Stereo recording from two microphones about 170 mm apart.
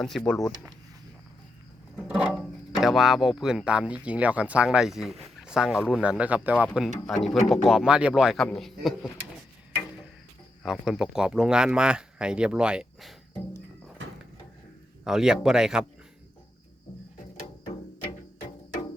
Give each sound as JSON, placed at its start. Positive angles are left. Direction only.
{"t": 0.0, "sound": "speech", "side_deg": 5}
{"t": 2.0, "sound": "speech", "side_deg": -5}
{"t": 10.6, "sound": "speech", "side_deg": -5}
{"t": 14.0, "sound": "a sound", "side_deg": -90}
{"t": 15.0, "sound": "speech", "side_deg": -5}